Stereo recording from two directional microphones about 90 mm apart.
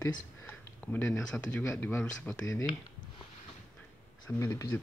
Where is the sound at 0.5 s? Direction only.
20° left (ahead or behind).